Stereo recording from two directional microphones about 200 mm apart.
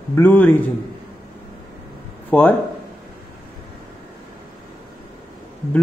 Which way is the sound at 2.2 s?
10° left (ahead or behind).